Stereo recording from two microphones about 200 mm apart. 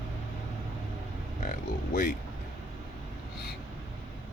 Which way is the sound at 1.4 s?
45° left (ahead or behind).